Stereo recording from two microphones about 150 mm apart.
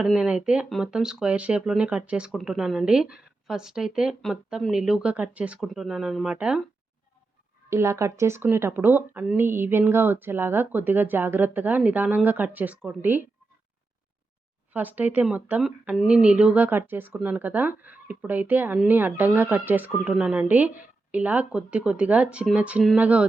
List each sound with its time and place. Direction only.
0.0 s speech: 5° right (ahead or behind)
7.7 s speech: 20° right (ahead or behind)
14.7 s speech: 10° right (ahead or behind)